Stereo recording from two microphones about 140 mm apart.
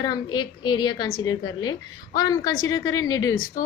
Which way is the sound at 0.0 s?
30° left (ahead or behind).